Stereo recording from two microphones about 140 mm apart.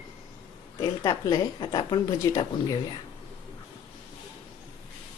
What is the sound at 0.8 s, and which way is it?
A woman's voice, 30° left (ahead or behind).